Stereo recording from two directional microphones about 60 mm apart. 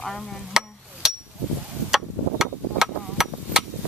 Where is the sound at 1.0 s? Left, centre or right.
Centre.